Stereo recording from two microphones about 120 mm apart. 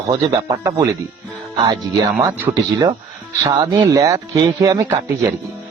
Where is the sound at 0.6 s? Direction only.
25° right (ahead or behind).